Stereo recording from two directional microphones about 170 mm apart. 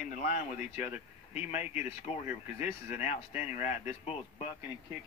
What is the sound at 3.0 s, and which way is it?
Speech, 40° left (ahead or behind).